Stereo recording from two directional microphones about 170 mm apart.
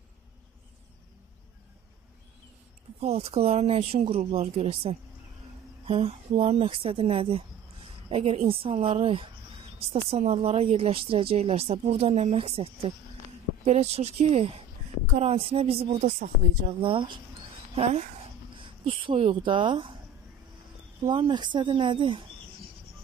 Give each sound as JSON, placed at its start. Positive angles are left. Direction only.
{"t": 3.0, "sound": "speech", "side_deg": -40}
{"t": 18.9, "sound": "speech", "side_deg": -35}
{"t": 21.0, "sound": "speech", "side_deg": -25}